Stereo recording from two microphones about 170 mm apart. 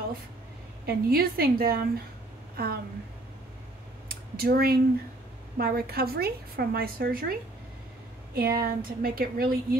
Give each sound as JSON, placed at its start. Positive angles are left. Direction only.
{"t": 0.8, "sound": "a woman's voice", "side_deg": -60}
{"t": 4.1, "sound": "a woman's voice", "side_deg": -60}
{"t": 8.4, "sound": "a woman's voice", "side_deg": -60}